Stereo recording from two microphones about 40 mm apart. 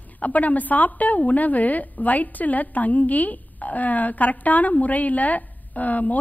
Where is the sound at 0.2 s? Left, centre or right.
Left.